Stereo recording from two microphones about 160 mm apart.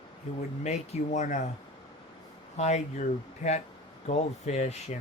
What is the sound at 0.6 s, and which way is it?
Speech, 45° left (ahead or behind).